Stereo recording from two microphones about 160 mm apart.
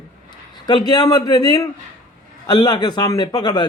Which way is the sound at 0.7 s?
25° left (ahead or behind).